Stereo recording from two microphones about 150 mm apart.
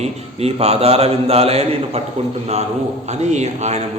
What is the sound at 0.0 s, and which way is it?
A man's voice, 45° right (ahead or behind).